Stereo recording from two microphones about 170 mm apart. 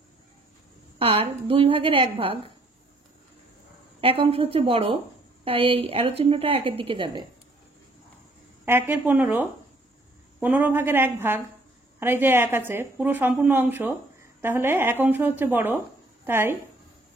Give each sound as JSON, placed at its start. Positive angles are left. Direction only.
{"t": 0.9, "sound": "a woman's voice", "side_deg": -35}
{"t": 4.0, "sound": "a woman's voice", "side_deg": -35}
{"t": 8.6, "sound": "a woman's voice", "side_deg": -10}